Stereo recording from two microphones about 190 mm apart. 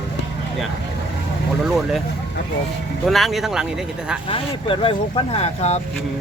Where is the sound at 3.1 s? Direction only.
Centre (ahead or behind).